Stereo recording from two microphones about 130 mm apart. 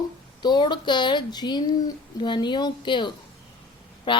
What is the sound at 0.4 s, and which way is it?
A woman's voice, 35° left (ahead or behind).